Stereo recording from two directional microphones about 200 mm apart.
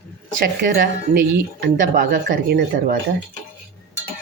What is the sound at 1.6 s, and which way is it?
Speech, 40° right (ahead or behind).